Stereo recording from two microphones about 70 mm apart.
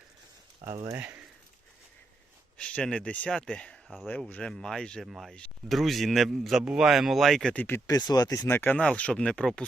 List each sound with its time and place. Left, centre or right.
0.7 s speech: right
0.9 s speech: right
2.6 s speech: centre
5.0 s speech: centre
5.3 s speech: centre
5.7 s speech: centre
7.5 s speech: left
7.9 s speech: left
8.4 s speech: left
9.0 s speech: centre